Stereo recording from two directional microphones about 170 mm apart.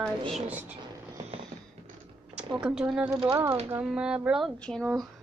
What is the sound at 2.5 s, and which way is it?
A woman's voice, 5° right (ahead or behind).